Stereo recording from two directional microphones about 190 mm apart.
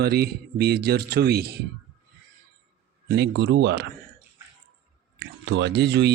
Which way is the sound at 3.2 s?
65° right (ahead or behind).